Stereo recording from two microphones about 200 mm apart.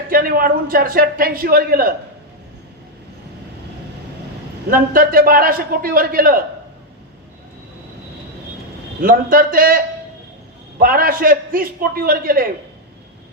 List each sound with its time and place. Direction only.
0.1 s a man's voice: 45° right (ahead or behind)
4.7 s a man's voice: 45° right (ahead or behind)
9.0 s a man's voice: 45° right (ahead or behind)